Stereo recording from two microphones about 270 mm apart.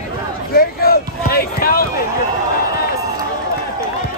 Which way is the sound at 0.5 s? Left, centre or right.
Left.